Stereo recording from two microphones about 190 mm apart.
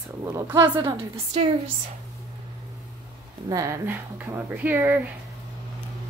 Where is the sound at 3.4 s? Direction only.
15° right (ahead or behind).